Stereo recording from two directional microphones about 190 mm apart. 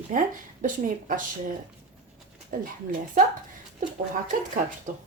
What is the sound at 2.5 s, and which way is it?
Speech, 45° right (ahead or behind).